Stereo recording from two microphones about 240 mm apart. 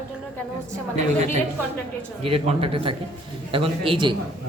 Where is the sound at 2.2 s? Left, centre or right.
Right.